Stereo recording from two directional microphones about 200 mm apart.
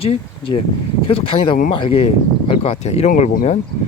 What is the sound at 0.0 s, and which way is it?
Speech, 30° left (ahead or behind).